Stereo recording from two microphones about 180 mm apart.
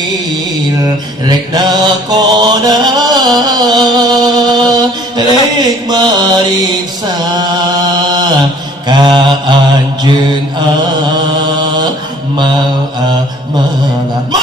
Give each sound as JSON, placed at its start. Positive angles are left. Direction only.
{"t": 1.2, "sound": "mantra", "side_deg": -20}
{"t": 11.3, "sound": "mantra", "side_deg": -25}